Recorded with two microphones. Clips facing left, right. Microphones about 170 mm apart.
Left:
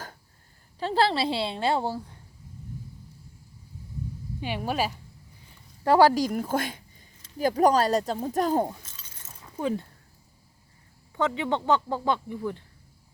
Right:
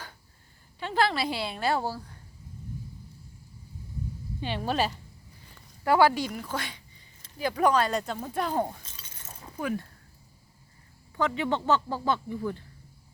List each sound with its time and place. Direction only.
0.8 s a woman's voice: 35° left (ahead or behind)
4.4 s speech: 10° left (ahead or behind)
5.8 s speech: 35° left (ahead or behind)
9.6 s speech: 25° left (ahead or behind)
11.2 s speech: 20° left (ahead or behind)